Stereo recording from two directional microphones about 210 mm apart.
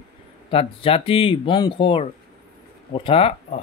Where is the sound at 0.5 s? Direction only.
25° left (ahead or behind).